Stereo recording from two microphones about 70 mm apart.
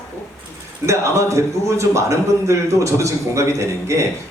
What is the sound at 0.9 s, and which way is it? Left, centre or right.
A man's voice, right.